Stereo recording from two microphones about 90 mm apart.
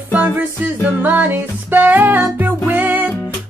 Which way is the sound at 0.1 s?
20° right (ahead or behind).